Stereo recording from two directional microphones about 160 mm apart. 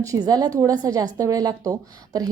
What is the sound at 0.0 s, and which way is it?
A woman's voice, 20° right (ahead or behind).